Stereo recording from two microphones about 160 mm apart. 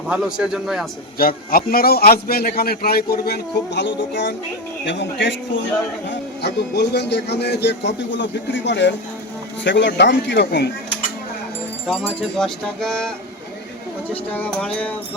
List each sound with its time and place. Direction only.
0.1 s speech: 5° right (ahead or behind)
1.2 s a man's voice: 65° left (ahead or behind); by 4.4 s 90° left
6.4 s a man's voice: 90° left
11.9 s speech: 5° left (ahead or behind)
14.1 s music: 10° left (ahead or behind)